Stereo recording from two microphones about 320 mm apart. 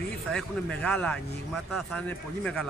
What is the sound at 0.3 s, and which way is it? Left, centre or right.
Speech, centre.